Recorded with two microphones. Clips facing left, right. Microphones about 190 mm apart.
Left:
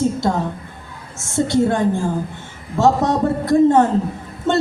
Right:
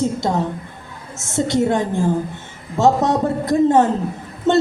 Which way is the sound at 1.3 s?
20° right (ahead or behind).